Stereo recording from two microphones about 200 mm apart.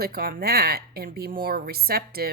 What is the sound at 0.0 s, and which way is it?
Speech, 50° right (ahead or behind).